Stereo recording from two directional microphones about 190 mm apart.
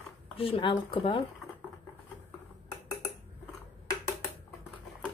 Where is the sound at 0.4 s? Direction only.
30° left (ahead or behind).